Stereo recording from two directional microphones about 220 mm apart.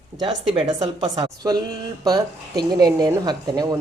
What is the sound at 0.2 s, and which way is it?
Speech, 20° right (ahead or behind).